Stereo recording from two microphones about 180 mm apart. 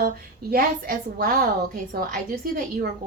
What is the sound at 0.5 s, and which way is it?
A woman's voice, 55° right (ahead or behind).